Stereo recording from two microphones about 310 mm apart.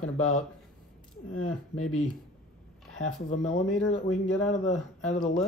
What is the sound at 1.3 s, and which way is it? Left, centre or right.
Speech, left.